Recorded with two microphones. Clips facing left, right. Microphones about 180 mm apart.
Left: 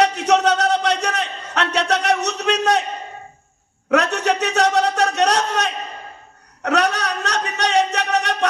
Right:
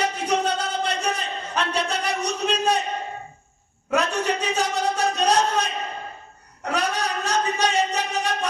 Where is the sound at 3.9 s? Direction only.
75° left (ahead or behind).